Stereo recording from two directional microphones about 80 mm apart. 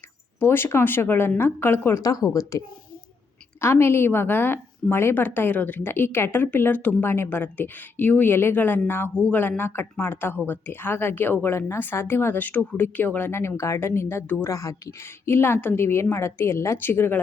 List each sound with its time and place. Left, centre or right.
0.3 s a woman's voice: left
2.0 s a woman's voice: left
3.6 s a woman's voice: left
14.4 s a woman's voice: left
15.3 s a woman's voice: left